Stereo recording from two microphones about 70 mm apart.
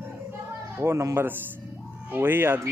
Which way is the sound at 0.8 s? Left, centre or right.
Right.